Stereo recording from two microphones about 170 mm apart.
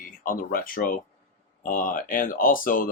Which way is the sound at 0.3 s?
55° left (ahead or behind).